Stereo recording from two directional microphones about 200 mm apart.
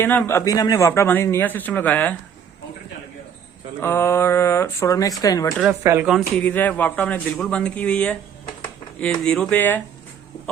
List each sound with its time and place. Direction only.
0.0 s a man's voice: 10° left (ahead or behind)
3.8 s a man's voice: 10° left (ahead or behind)
5.8 s speech: 15° right (ahead or behind)
6.1 s a man's voice: centre (ahead or behind)
8.6 s a sound: 5° left (ahead or behind)
9.2 s a man's voice: 5° left (ahead or behind)